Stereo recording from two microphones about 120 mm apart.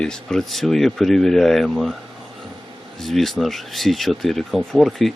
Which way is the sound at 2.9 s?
Centre (ahead or behind).